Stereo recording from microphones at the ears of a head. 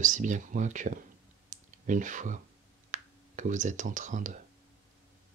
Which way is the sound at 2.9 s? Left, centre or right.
Right.